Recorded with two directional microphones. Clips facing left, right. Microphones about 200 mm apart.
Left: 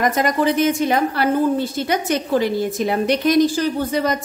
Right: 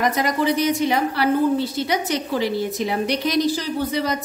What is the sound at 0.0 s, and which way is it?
A woman's voice, 50° left (ahead or behind).